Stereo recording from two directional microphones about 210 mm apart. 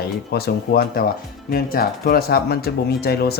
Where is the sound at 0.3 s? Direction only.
45° left (ahead or behind).